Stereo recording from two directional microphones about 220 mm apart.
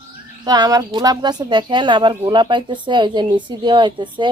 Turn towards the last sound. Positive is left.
turn(degrees=-20)  # may be behind; listen again after turning